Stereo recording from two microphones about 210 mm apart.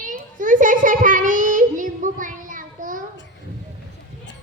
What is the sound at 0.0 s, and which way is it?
Child singing, 40° right (ahead or behind).